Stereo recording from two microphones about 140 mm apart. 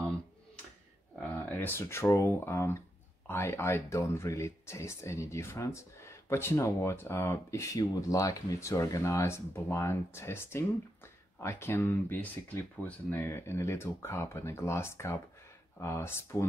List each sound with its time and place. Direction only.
1.3 s speech: 15° left (ahead or behind)